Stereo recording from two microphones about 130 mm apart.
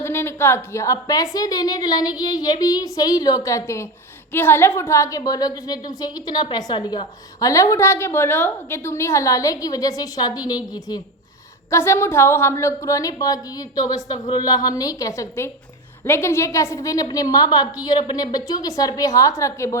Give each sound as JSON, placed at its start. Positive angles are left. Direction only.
{"t": 0.0, "sound": "a woman's voice", "side_deg": 20}